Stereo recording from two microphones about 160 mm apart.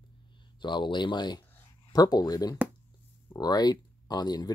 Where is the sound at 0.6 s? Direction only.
30° left (ahead or behind).